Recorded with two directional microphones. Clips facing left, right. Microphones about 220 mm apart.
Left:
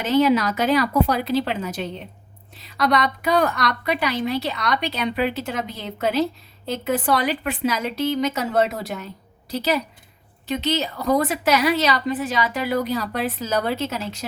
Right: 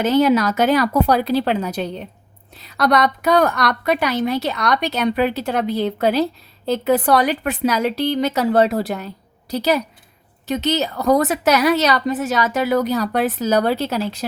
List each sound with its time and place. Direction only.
0.2 s a woman's voice: 50° right (ahead or behind)
10.5 s a woman's voice: 45° right (ahead or behind)